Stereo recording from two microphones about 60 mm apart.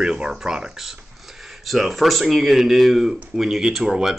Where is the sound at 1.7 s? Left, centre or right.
Centre.